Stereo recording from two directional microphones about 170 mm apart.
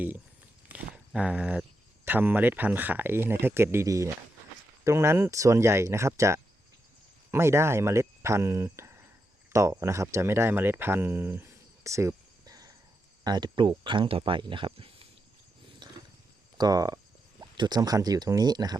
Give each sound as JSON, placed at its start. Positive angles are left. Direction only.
{"t": 1.1, "sound": "speech", "side_deg": -5}
{"t": 15.8, "sound": "roaring cats", "side_deg": -25}
{"t": 16.6, "sound": "speech", "side_deg": -20}